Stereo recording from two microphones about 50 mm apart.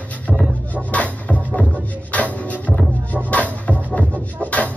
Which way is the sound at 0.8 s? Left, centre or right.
Left.